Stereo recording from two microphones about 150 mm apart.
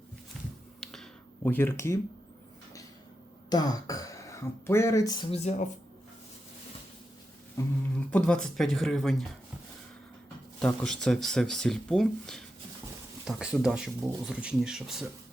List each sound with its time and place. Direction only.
0.8 s a sound: centre (ahead or behind)
1.5 s speech: 15° left (ahead or behind)
3.5 s speech: 25° left (ahead or behind)
5.3 s speech: 50° left (ahead or behind)
7.6 s speech: 20° left (ahead or behind)
7.9 s speech: 10° left (ahead or behind)
10.8 s speech: 5° left (ahead or behind)